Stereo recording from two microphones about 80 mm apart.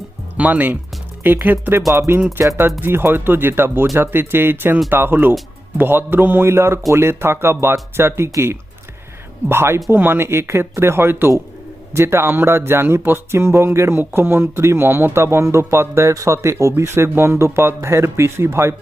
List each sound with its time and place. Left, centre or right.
0.3 s speech: centre